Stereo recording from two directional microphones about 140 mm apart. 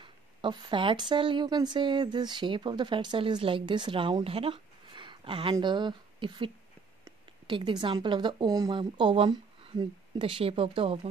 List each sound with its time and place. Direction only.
0.0 s speech: 35° right (ahead or behind)